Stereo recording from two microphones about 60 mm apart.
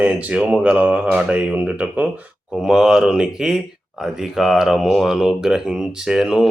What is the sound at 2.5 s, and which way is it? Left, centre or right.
Speech, centre.